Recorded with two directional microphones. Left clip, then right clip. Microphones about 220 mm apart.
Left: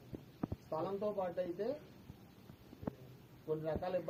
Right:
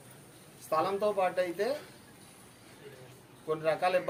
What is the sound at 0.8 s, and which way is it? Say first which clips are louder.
Speech: right 8 dB; 15° right (ahead or behind).